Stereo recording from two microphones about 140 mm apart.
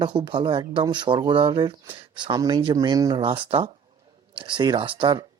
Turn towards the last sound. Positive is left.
turn(degrees=-40)  # may be behind; listen again after turning